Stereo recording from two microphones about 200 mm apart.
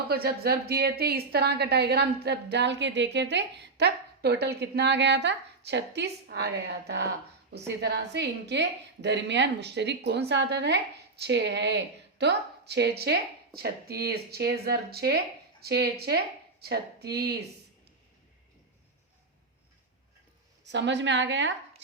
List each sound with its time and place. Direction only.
0.1 s a woman's voice: 50° right (ahead or behind)
20.7 s a woman's voice: 60° right (ahead or behind)